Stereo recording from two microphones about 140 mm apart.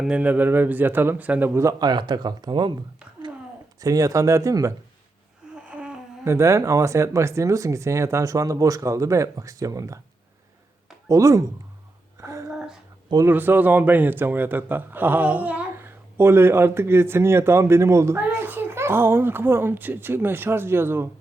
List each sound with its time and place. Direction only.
0.0 s a man's voice: 10° right (ahead or behind); by 2.7 s 35° right (ahead or behind)
3.8 s speech: 25° right (ahead or behind)
5.6 s humming: 10° right (ahead or behind)
6.2 s speech: 20° right (ahead or behind)
11.1 s speech: 25° right (ahead or behind)
12.2 s a sound: 20° right (ahead or behind)
12.5 s a sound: 5° right (ahead or behind)
13.2 s a man's voice: 15° right (ahead or behind)